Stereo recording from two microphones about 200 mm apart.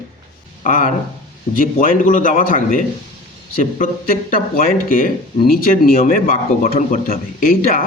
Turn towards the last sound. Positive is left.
turn(degrees=45)  # may be behind; listen again after turning